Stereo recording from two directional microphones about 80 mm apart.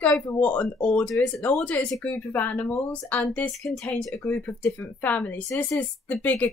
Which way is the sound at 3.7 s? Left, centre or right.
Centre.